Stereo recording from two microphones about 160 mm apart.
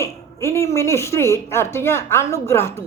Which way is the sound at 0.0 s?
15° left (ahead or behind).